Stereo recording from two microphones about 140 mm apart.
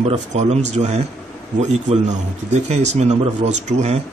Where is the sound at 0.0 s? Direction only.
55° right (ahead or behind).